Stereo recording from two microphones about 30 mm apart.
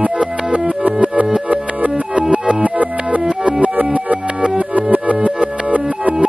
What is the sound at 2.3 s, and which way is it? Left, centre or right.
Music, right.